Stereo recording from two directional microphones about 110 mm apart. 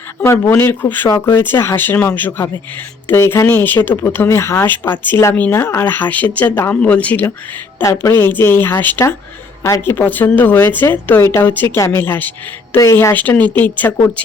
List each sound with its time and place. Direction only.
0.2 s a woman's voice: 25° left (ahead or behind)
13.1 s a woman's voice: 15° left (ahead or behind)